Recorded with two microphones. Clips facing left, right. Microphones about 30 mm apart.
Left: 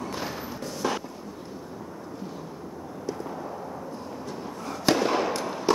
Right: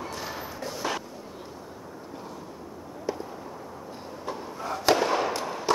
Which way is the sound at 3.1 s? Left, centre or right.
Centre.